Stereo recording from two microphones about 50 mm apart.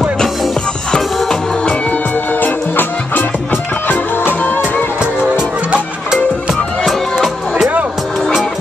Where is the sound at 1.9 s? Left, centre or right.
Left.